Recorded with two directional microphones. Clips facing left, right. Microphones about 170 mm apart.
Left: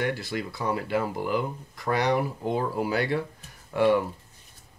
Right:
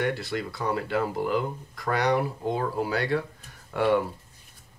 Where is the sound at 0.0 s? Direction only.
5° left (ahead or behind).